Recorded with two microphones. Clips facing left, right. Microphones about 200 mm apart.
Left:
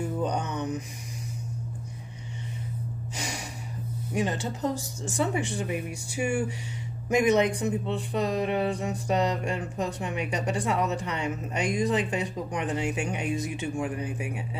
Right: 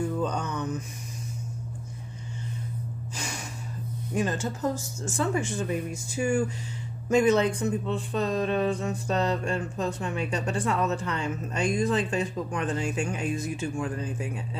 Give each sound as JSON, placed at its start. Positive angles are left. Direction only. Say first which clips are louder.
{"t": 0.2, "sound": "mantra", "louder": "even", "side_deg": 15}
{"t": 4.1, "sound": "speech", "louder": "right 1 dB", "side_deg": 20}